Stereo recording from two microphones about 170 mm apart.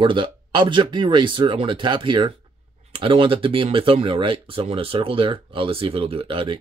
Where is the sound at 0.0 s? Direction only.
30° right (ahead or behind).